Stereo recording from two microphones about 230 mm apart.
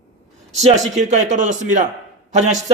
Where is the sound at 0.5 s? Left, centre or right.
Right.